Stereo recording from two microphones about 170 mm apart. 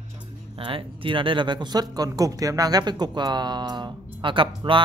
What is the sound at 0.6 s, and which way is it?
Speech, 30° right (ahead or behind).